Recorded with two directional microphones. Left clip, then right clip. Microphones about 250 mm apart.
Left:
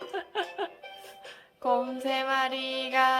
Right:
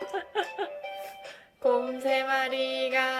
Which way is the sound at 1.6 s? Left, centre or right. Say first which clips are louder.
Right 2 dB; centre.